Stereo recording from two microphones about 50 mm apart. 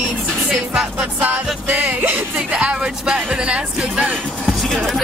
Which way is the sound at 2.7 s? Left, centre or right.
Centre.